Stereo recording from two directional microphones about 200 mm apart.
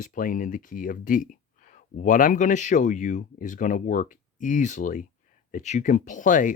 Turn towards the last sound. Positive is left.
turn(degrees=40)  # may be behind; listen again after turning